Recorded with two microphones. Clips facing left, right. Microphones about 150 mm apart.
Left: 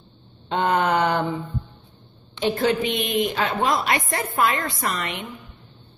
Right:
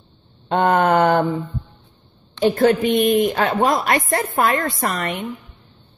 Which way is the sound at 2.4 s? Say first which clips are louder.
Right 6 dB; 50° right (ahead or behind).